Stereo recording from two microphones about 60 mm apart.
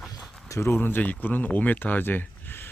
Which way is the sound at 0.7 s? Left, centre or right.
Left.